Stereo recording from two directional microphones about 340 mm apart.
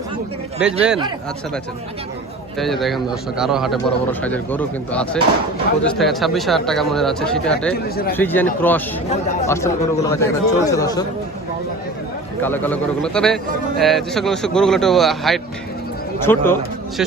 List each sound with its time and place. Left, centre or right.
0.6 s a man's voice: centre
2.8 s a man's voice: centre
7.7 s speech: left
8.1 s a man's voice: centre
12.4 s a man's voice: centre